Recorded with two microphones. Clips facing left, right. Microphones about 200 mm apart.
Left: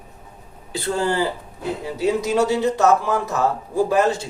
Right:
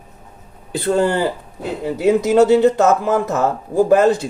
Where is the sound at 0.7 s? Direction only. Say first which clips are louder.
Right 5 dB; 60° right (ahead or behind).